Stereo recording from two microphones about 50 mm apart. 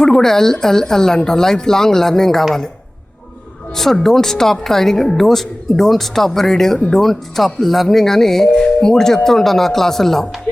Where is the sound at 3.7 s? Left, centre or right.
Centre.